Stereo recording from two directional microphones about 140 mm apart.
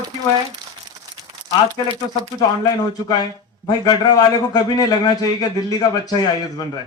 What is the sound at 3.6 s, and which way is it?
A man's voice, 30° left (ahead or behind).